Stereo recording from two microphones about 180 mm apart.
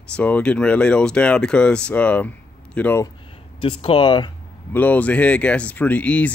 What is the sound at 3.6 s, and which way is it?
Speech, 30° left (ahead or behind).